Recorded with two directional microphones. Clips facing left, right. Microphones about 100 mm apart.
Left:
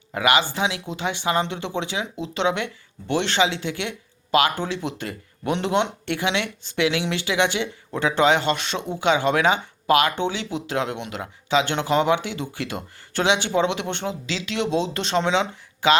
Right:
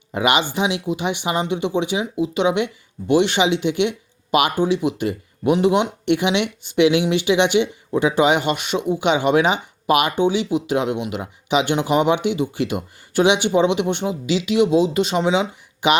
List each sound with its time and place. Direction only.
0.1 s speech: 20° right (ahead or behind)